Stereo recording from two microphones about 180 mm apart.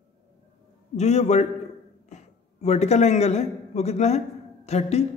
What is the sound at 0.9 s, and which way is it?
A man's voice, 40° left (ahead or behind).